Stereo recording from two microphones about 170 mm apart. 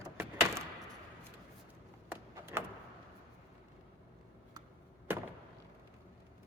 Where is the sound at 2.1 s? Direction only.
15° right (ahead or behind).